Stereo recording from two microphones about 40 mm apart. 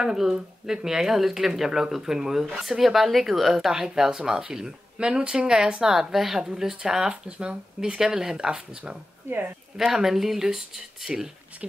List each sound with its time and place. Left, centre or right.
0.0 s speech: centre
9.8 s speech: centre